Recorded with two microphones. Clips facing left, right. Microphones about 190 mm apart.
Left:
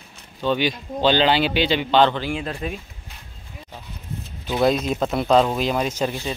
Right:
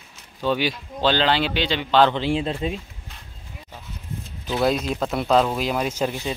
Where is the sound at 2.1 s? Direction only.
25° right (ahead or behind).